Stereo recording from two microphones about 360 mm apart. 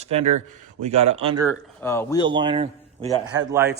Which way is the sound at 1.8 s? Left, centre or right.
Centre.